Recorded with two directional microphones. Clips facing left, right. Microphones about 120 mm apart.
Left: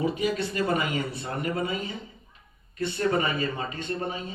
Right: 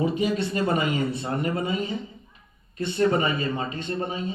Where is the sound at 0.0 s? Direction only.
25° right (ahead or behind).